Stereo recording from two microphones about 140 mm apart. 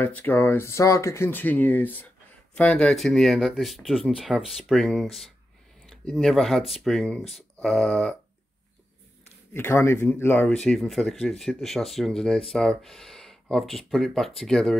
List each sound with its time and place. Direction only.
0.0 s speech: 15° left (ahead or behind)
9.5 s speech: 15° left (ahead or behind)
10.5 s speech: 5° left (ahead or behind)